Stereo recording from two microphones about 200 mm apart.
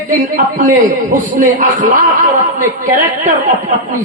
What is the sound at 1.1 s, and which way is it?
Speech, 40° right (ahead or behind).